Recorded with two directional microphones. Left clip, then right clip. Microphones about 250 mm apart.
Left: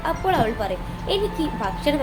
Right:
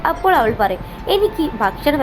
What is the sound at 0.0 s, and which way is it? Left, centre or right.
A woman's voice, centre.